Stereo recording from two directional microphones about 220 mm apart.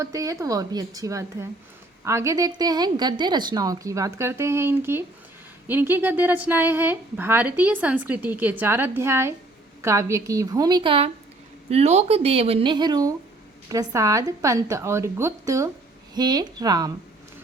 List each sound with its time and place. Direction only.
0.0 s a woman's voice: 15° right (ahead or behind)